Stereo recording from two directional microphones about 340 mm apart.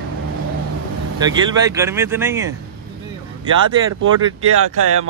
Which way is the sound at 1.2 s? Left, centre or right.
Centre.